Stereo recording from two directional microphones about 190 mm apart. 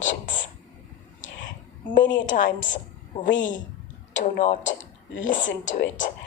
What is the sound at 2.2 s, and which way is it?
Speech, 40° left (ahead or behind).